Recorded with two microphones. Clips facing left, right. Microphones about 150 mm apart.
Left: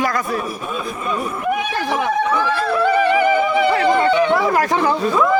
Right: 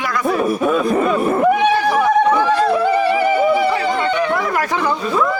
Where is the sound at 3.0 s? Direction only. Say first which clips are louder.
Right 1 dB; 10° right (ahead or behind).